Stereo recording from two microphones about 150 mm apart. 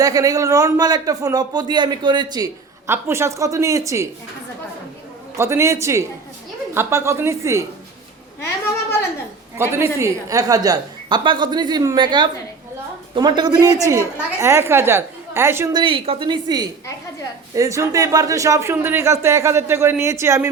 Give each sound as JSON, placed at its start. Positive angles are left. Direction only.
{"t": 0.0, "sound": "a man's voice", "side_deg": -25}
{"t": 5.4, "sound": "a man's voice", "side_deg": -20}
{"t": 9.6, "sound": "a man's voice", "side_deg": -15}
{"t": 15.7, "sound": "a woman's voice", "side_deg": -35}